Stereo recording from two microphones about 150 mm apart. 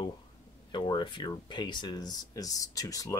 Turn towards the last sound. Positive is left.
turn(degrees=25)  # may be behind; listen again after turning